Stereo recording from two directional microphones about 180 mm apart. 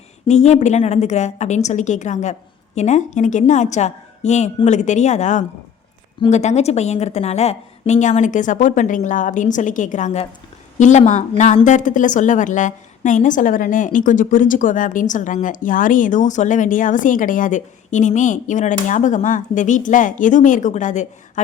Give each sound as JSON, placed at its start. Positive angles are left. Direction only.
{"t": 0.3, "sound": "a woman's voice", "side_deg": 40}